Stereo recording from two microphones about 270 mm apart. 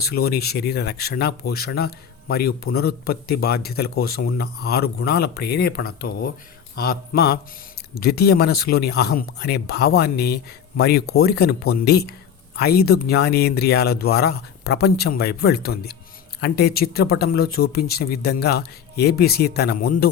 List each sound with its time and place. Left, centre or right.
0.0 s speech: left